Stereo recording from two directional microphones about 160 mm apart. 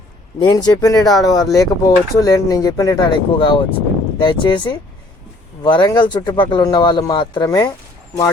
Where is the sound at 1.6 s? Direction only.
20° left (ahead or behind).